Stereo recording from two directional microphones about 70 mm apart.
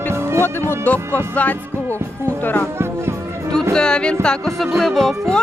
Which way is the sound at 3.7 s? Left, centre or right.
Centre.